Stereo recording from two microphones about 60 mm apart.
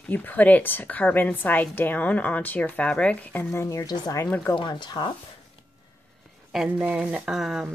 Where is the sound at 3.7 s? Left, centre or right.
Left.